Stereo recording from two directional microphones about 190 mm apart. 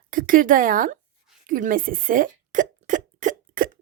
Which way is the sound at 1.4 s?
45° right (ahead or behind).